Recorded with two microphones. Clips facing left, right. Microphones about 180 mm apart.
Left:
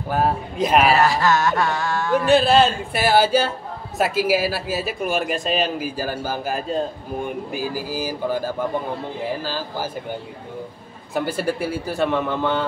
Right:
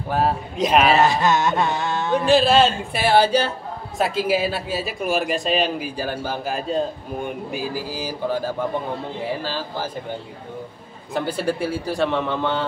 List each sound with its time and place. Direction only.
0.1 s speech: centre (ahead or behind)
0.9 s a sound: 20° right (ahead or behind)
2.2 s speech: centre (ahead or behind)
9.4 s speech: 5° left (ahead or behind)
11.1 s speech: 5° left (ahead or behind)